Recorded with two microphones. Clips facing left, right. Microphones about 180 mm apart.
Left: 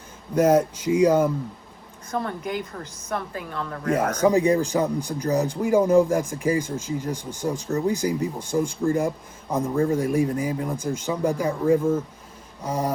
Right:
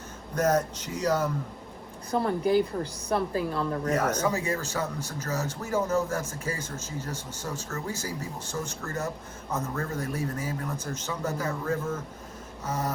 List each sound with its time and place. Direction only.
0.3 s a man's voice: 10° left (ahead or behind)
2.0 s speech: 30° right (ahead or behind)
3.9 s a man's voice: 10° left (ahead or behind)